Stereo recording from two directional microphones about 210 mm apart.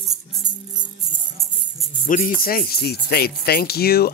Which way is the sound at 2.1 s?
40° left (ahead or behind).